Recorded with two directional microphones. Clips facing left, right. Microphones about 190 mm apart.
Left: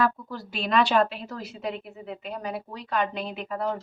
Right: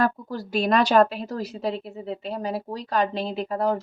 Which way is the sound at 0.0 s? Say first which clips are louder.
Right 2 dB; 40° right (ahead or behind).